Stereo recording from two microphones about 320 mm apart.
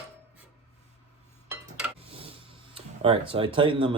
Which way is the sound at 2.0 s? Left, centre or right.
Centre.